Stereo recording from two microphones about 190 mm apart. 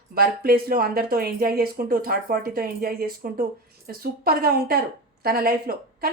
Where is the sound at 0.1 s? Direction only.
50° right (ahead or behind).